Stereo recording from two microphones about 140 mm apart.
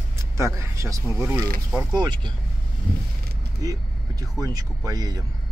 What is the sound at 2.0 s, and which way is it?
Speech, 30° right (ahead or behind).